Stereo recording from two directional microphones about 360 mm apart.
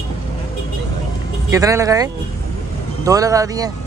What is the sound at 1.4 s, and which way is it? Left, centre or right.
Speech, centre.